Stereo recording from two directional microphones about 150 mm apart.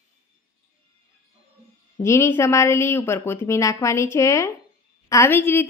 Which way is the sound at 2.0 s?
20° left (ahead or behind).